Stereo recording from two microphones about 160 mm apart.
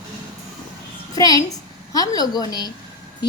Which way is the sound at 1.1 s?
25° left (ahead or behind).